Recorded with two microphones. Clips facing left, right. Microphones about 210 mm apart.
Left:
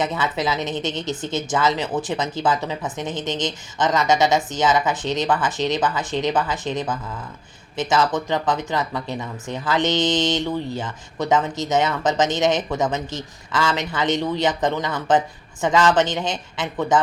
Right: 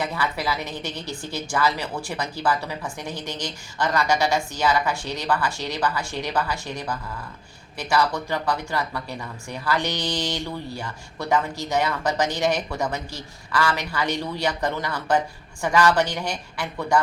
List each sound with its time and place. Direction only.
0.0 s speech: 20° left (ahead or behind)